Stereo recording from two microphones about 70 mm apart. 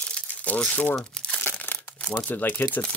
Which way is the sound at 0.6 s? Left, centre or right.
Centre.